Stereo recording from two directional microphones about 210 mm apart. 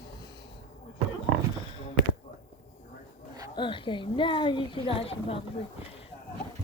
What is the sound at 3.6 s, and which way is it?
A woman's voice, 25° left (ahead or behind).